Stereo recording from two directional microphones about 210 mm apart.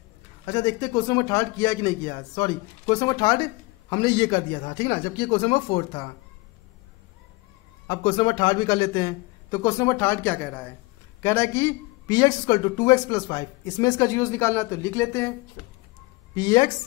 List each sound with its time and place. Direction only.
0.5 s speech: 20° left (ahead or behind)
7.9 s speech: 25° left (ahead or behind)
16.3 s speech: 20° left (ahead or behind)